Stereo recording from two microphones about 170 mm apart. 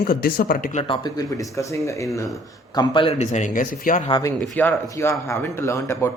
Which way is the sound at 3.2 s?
45° left (ahead or behind).